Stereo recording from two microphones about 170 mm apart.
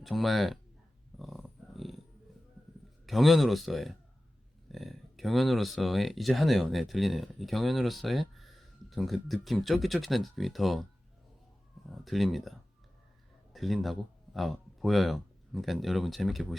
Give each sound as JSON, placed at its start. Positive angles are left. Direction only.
{"t": 0.0, "sound": "speech", "side_deg": 0}
{"t": 1.2, "sound": "dog", "side_deg": 0}
{"t": 3.1, "sound": "speech", "side_deg": 0}
{"t": 11.9, "sound": "speech", "side_deg": 0}